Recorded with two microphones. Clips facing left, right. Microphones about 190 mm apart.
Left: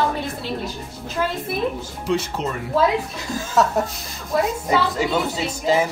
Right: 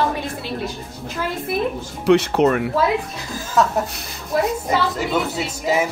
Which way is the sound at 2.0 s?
70° right (ahead or behind).